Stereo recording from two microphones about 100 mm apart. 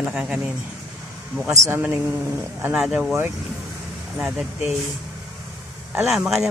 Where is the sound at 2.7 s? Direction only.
10° right (ahead or behind).